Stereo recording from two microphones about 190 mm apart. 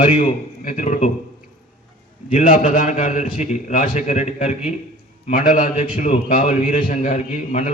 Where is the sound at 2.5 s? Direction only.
40° left (ahead or behind).